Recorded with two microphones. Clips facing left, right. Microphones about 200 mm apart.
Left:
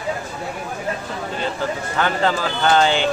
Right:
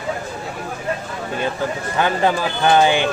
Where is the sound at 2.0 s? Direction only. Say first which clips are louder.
Right 2 dB; 15° right (ahead or behind).